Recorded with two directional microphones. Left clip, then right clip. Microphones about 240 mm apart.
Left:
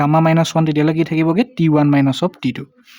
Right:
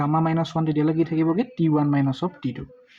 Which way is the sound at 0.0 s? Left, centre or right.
Left.